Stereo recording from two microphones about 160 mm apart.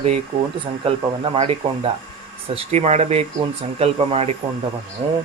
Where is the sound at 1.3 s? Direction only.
40° right (ahead or behind).